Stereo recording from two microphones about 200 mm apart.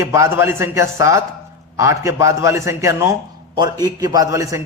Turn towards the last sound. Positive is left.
turn(degrees=-15)  # may be behind; listen again after turning